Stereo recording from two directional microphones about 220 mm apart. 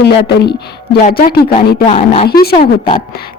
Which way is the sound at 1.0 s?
35° left (ahead or behind).